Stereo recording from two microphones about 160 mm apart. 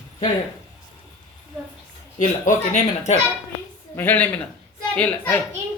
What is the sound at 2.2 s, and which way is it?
Speech, 50° left (ahead or behind).